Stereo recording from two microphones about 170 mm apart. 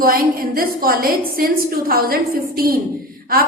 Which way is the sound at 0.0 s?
60° right (ahead or behind).